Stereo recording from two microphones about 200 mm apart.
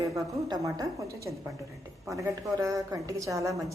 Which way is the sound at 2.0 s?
15° right (ahead or behind).